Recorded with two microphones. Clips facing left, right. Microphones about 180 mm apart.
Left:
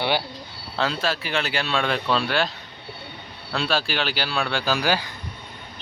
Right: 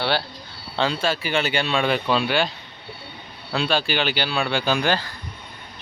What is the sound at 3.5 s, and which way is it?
Speech, centre (ahead or behind).